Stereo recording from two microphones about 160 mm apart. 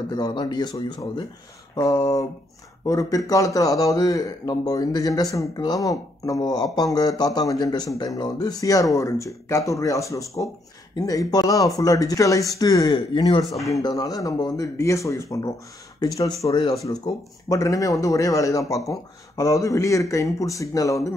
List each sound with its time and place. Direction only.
0.1 s a man's voice: 30° left (ahead or behind)